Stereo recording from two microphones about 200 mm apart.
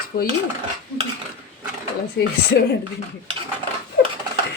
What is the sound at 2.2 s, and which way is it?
Speech, 60° left (ahead or behind).